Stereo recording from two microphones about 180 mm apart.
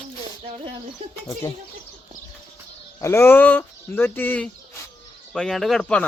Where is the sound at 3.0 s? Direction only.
15° left (ahead or behind).